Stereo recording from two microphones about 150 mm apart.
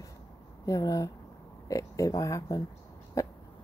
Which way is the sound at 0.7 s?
20° left (ahead or behind).